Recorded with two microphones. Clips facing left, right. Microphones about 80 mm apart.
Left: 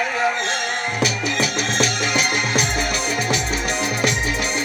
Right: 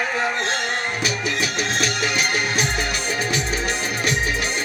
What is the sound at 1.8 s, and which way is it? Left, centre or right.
Music, right.